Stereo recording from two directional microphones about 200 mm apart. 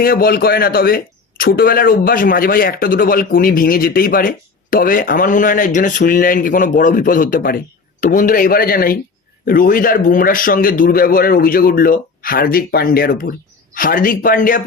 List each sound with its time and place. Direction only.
0.0 s a man's voice: 45° left (ahead or behind)